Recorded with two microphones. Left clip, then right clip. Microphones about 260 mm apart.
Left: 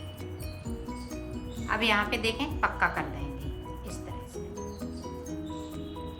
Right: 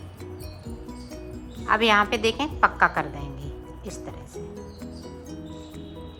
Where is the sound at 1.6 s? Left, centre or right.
Centre.